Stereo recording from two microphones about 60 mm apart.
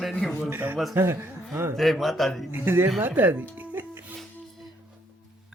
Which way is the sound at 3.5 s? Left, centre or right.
Right.